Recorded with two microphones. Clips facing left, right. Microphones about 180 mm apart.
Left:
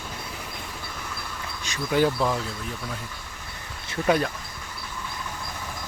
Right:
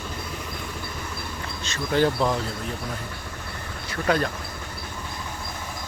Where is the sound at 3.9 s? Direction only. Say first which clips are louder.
Left 1 dB; 20° left (ahead or behind).